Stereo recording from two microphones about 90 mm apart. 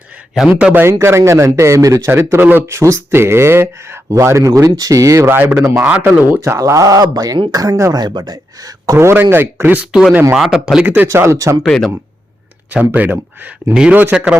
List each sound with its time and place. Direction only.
0.4 s speech: 20° right (ahead or behind)
2.7 s speech: 35° right (ahead or behind)
5.8 s speech: 20° right (ahead or behind); by 8.0 s 40° right (ahead or behind)
8.0 s speech: 50° right (ahead or behind)
9.0 s speech: 30° right (ahead or behind)
9.8 s speech: 5° right (ahead or behind)
10.8 s speech: 20° right (ahead or behind)
11.1 s speech: 30° right (ahead or behind)
11.6 s speech: 10° left (ahead or behind)
12.7 s speech: 20° right (ahead or behind)